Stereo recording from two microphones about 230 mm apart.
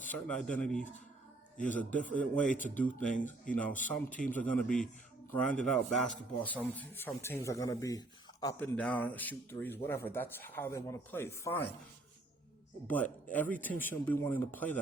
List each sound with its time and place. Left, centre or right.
0.1 s speech: centre
2.0 s speech: centre
2.4 s speech: left
2.7 s speech: centre
13.3 s speech: centre